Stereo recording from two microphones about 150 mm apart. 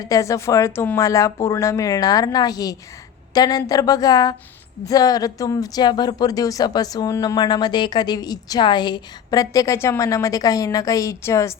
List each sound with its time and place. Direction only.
0.0 s speech: 20° left (ahead or behind)